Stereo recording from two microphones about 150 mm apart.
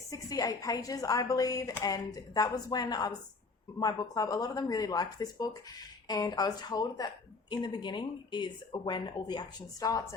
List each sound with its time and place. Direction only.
0.1 s a woman's voice: 25° left (ahead or behind)